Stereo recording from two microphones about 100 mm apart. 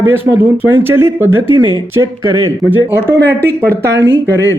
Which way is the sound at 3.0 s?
20° right (ahead or behind).